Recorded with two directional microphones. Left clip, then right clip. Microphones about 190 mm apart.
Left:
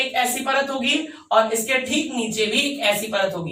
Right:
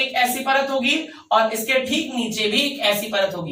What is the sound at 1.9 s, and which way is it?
A woman's voice, 15° left (ahead or behind).